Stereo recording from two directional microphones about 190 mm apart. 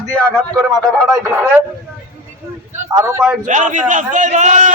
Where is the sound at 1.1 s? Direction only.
15° right (ahead or behind).